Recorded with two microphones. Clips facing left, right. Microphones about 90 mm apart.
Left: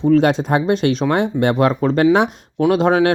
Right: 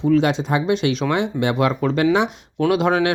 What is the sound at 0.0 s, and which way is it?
Speech, 45° left (ahead or behind).